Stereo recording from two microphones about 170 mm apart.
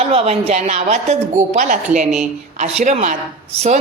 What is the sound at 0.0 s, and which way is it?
A woman's voice, 35° right (ahead or behind).